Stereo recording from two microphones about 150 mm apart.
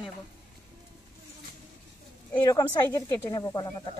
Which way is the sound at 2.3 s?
20° left (ahead or behind).